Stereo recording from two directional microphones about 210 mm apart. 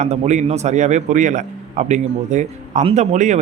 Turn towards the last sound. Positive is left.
turn(degrees=-35)  # may be behind; listen again after turning